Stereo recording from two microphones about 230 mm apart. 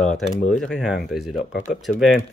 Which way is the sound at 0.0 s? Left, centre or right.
Centre.